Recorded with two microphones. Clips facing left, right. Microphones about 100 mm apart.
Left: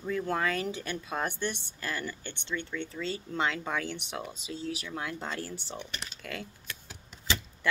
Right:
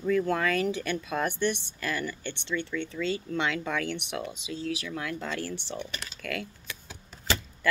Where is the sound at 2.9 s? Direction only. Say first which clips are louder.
Right 3 dB; 30° left (ahead or behind).